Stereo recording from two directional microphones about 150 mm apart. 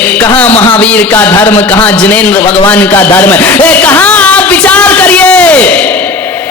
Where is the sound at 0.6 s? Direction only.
10° left (ahead or behind).